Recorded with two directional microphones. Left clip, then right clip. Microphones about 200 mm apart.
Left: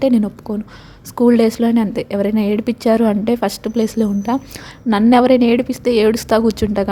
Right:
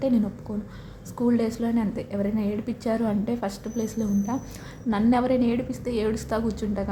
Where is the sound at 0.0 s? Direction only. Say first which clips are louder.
Left 9 dB; 40° left (ahead or behind).